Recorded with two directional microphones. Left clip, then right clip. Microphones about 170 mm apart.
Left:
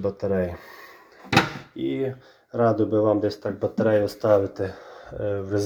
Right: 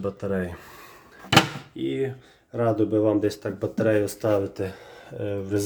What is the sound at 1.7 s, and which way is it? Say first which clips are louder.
Speech: even; 20° right (ahead or behind).